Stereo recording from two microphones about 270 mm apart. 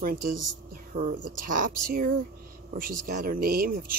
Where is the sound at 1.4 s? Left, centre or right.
Right.